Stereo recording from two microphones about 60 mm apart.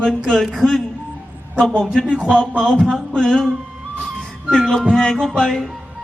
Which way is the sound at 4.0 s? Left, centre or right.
Centre.